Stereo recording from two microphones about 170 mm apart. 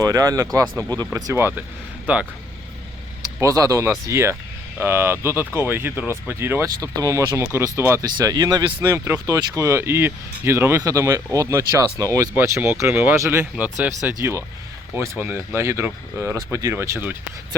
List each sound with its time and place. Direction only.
0.0 s speech: 20° right (ahead or behind)
0.7 s speech: 5° left (ahead or behind)
0.9 s speech: 15° right (ahead or behind)
3.4 s speech: 20° right (ahead or behind)